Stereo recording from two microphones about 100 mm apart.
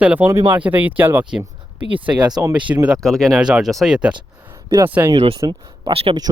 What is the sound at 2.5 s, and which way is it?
Speech, 15° right (ahead or behind).